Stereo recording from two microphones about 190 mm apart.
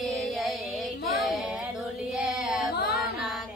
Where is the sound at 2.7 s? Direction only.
55° left (ahead or behind).